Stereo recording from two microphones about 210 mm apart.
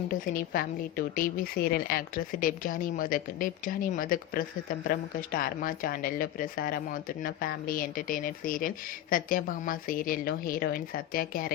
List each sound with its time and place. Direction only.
0.1 s a woman's voice: 45° left (ahead or behind)